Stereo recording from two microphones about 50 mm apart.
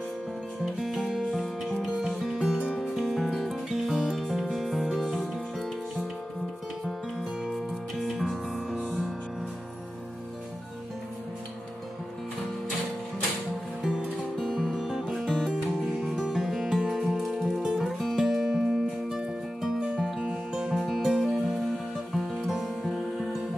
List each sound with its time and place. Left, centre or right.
0.7 s music: centre
7.5 s music: centre
13.8 s music: centre
14.5 s music: centre
15.2 s music: centre
15.9 s music: centre
20.8 s music: centre